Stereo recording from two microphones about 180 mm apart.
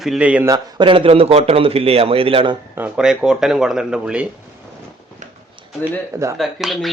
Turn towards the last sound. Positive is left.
turn(degrees=0)  # may be behind; listen again after turning